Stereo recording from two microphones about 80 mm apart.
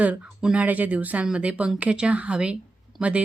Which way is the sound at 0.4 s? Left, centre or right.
Centre.